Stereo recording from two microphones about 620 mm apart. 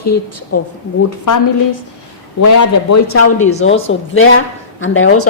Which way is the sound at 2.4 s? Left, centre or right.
Left.